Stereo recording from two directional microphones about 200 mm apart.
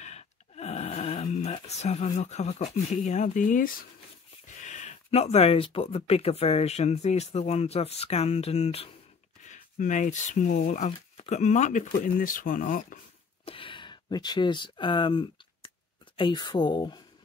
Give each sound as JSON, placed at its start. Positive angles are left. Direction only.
{"t": 0.0, "sound": "speech", "side_deg": 35}
{"t": 13.5, "sound": "speech", "side_deg": 25}